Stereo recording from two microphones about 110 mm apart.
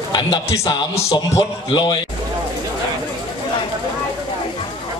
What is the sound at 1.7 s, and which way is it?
Speech, 45° left (ahead or behind).